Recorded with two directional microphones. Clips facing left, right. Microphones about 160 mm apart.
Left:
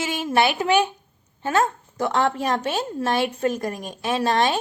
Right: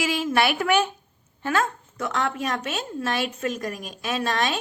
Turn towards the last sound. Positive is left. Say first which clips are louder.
# left 5 dB
turn(degrees=30)  # may be behind; listen again after turning